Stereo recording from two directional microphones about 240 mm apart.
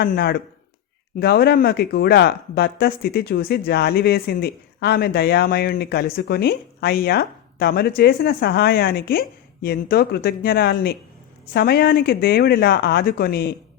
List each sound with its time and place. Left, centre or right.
0.0 s speech: left